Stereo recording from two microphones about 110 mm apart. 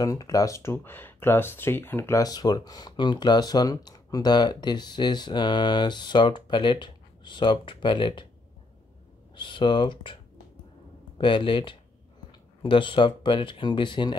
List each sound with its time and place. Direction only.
0.0 s speech: 35° left (ahead or behind)
2.2 s speech: 40° left (ahead or behind)
9.3 s speech: 45° left (ahead or behind)
11.1 s speech: 50° left (ahead or behind)